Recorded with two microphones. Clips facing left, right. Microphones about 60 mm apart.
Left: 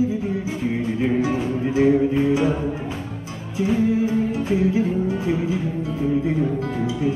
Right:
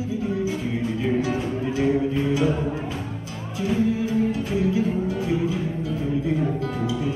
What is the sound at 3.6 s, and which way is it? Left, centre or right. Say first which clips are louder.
Music: left 3 dB; left.